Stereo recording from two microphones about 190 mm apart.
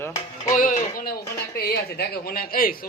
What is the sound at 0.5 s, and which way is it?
Music, 45° left (ahead or behind).